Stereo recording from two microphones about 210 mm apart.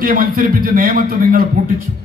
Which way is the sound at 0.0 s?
45° right (ahead or behind).